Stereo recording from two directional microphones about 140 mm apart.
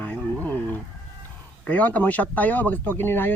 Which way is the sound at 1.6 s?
10° left (ahead or behind).